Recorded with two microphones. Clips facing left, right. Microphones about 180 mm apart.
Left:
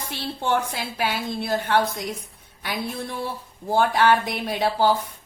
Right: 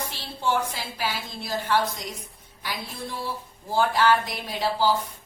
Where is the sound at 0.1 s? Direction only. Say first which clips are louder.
Left 5 dB; 60° left (ahead or behind).